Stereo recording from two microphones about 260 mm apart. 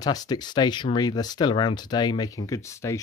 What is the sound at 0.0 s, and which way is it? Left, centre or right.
Speech, centre.